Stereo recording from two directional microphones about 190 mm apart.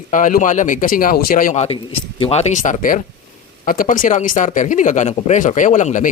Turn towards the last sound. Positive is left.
turn(degrees=40)  # may be behind; listen again after turning